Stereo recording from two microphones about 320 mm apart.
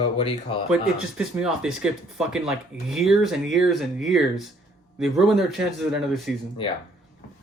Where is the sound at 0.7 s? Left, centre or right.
Centre.